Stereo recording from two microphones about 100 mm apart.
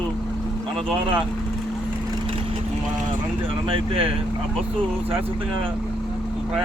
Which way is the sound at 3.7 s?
65° right (ahead or behind).